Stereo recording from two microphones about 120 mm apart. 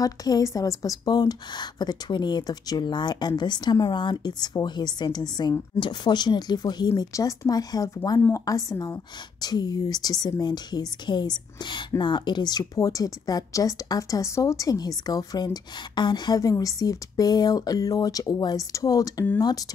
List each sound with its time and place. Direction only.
0.0 s speech: 30° left (ahead or behind)